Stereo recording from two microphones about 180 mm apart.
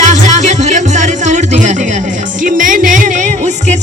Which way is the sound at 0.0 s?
40° right (ahead or behind).